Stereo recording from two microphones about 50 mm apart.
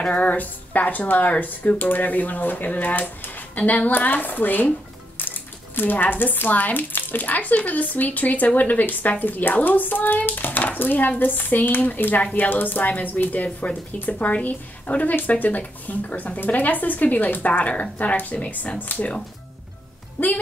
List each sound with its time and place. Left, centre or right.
0.0 s speech: left